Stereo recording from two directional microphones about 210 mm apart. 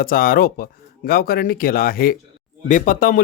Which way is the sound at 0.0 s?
45° left (ahead or behind).